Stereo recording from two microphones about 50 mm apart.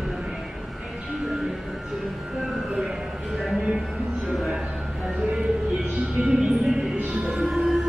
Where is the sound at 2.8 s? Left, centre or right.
Centre.